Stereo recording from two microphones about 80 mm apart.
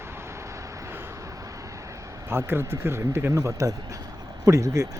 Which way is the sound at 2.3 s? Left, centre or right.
Right.